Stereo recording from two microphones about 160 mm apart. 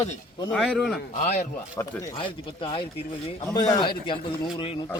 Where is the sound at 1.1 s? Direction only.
45° left (ahead or behind).